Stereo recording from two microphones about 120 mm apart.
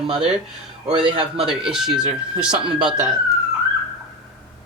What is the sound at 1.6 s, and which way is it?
Speech, 5° right (ahead or behind).